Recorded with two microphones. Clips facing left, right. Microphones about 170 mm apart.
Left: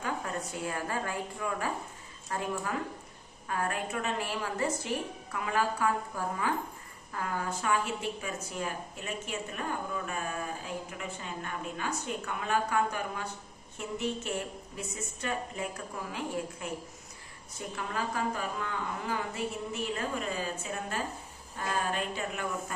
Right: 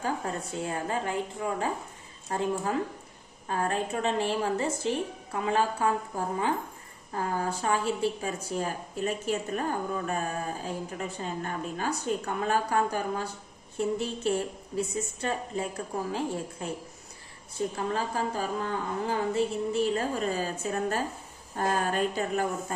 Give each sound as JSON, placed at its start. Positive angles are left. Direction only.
{"t": 0.0, "sound": "a woman's voice", "side_deg": -30}